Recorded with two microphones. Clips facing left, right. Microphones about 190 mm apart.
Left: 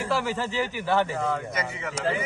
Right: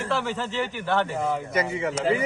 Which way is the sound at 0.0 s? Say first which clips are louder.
Even; 5° left (ahead or behind).